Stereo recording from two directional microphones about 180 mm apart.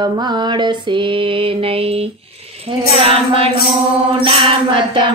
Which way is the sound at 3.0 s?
30° right (ahead or behind).